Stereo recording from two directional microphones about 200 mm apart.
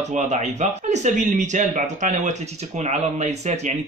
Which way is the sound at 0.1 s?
35° right (ahead or behind).